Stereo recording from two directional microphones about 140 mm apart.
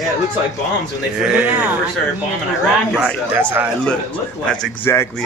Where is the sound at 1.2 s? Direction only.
5° right (ahead or behind).